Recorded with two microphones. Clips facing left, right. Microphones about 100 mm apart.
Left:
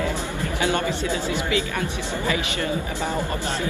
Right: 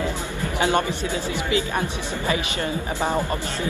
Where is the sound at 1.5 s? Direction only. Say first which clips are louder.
Right 1 dB; 30° right (ahead or behind).